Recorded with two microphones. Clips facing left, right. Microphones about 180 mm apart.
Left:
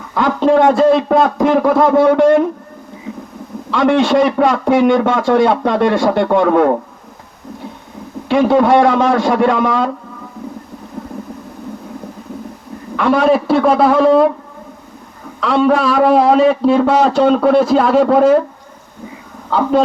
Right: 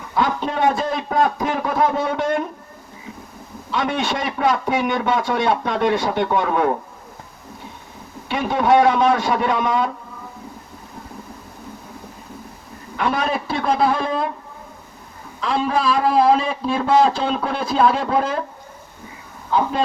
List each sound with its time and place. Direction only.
0.1 s a man's voice: 85° left
3.7 s a man's voice: 80° left
8.3 s a man's voice: 80° left
13.0 s a man's voice: 80° left
15.4 s a man's voice: 75° left (ahead or behind)
19.5 s a man's voice: 80° left